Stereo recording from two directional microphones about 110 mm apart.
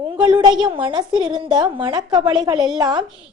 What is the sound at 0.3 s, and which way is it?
A woman's voice, 40° right (ahead or behind).